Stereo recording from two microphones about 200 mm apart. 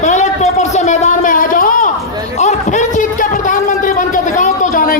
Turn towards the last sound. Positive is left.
turn(degrees=45)  # may be behind; listen again after turning